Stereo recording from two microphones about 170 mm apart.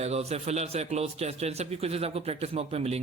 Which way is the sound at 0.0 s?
40° right (ahead or behind).